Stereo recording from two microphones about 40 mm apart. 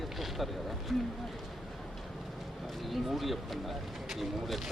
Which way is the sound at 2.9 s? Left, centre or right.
Centre.